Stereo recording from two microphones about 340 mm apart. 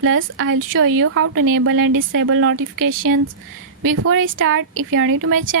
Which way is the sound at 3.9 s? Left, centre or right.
Right.